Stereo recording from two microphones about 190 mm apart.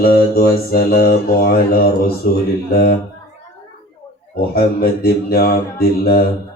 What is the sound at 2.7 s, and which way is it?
Mantra, 50° left (ahead or behind).